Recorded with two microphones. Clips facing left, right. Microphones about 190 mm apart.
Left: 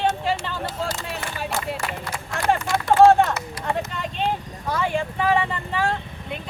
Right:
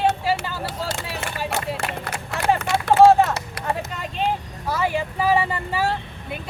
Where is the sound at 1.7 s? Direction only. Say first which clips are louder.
Right 1 dB; 60° right (ahead or behind).